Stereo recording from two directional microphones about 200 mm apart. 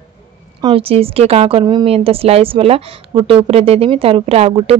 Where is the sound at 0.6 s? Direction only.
25° right (ahead or behind).